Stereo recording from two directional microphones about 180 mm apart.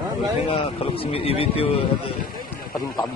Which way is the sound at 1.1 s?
30° left (ahead or behind).